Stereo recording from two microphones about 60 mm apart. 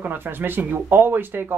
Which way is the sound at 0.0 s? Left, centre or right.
Right.